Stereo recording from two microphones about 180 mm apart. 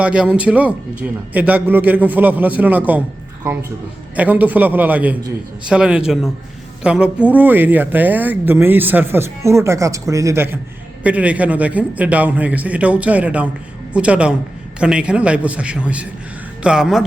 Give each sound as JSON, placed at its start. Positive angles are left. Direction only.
{"t": 0.0, "sound": "speech", "side_deg": -5}
{"t": 4.1, "sound": "a man's voice", "side_deg": -10}